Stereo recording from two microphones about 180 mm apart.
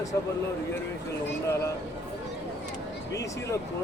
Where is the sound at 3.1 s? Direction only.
15° left (ahead or behind).